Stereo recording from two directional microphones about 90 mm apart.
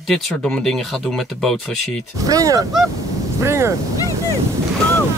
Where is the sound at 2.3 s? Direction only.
40° right (ahead or behind).